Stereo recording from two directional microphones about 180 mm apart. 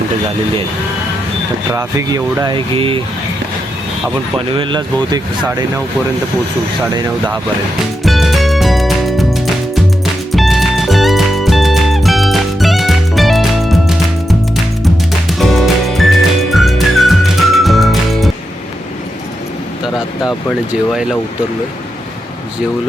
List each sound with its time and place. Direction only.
1.7 s speech: 20° right (ahead or behind)
4.5 s speech: 25° right (ahead or behind)
8.0 s music: centre (ahead or behind)
15.4 s music: centre (ahead or behind)